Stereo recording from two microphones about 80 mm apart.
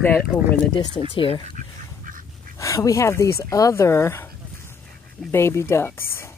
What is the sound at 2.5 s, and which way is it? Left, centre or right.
Speech, left.